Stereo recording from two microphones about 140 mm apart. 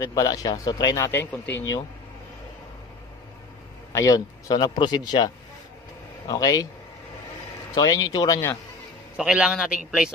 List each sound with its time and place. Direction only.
0.0 s speech: 25° left (ahead or behind)
3.9 s speech: 25° left (ahead or behind)
7.7 s speech: 25° left (ahead or behind)
9.1 s a man's voice: 5° right (ahead or behind)